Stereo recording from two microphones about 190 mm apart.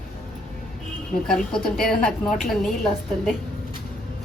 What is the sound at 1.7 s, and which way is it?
A woman's voice, centre (ahead or behind).